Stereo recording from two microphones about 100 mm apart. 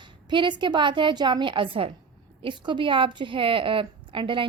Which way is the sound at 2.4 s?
50° right (ahead or behind).